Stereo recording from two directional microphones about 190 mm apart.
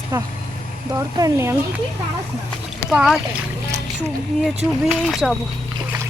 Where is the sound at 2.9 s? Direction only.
Centre (ahead or behind).